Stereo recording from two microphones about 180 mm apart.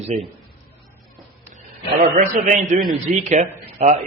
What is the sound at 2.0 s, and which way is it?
A man's voice, 45° right (ahead or behind).